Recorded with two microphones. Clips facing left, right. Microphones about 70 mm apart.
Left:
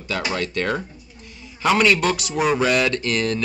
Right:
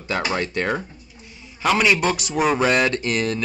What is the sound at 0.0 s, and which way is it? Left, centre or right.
Speech, right.